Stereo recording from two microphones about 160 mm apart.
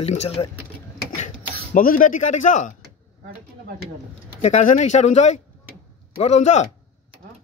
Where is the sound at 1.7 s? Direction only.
60° left (ahead or behind).